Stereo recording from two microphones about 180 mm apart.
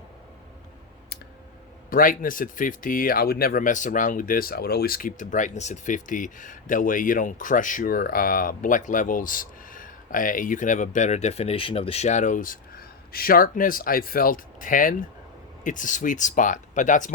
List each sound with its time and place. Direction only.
1.9 s speech: 50° left (ahead or behind)